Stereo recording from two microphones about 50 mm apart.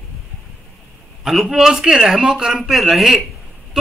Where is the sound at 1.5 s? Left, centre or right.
Centre.